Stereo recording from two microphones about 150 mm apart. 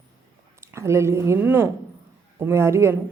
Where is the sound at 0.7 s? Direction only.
20° right (ahead or behind).